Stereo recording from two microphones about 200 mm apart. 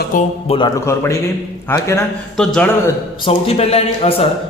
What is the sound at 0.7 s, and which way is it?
A man's voice, 15° left (ahead or behind).